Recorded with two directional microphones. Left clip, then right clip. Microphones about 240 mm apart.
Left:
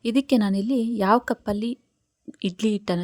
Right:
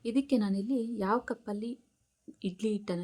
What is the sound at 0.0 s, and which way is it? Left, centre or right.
Speech, left.